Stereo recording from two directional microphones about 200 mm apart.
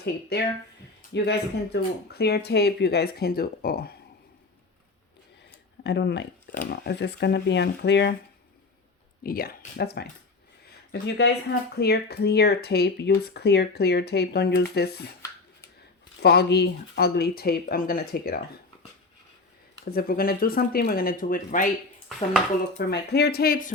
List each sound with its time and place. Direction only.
0.0 s speech: 55° left (ahead or behind)
5.8 s speech: 60° left (ahead or behind)
9.2 s speech: 45° left (ahead or behind)
16.2 s speech: 55° left (ahead or behind)
19.8 s speech: 50° left (ahead or behind)
22.9 s speech: 55° left (ahead or behind)